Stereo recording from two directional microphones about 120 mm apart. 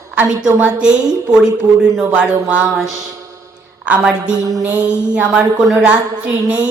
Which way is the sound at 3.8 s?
10° right (ahead or behind).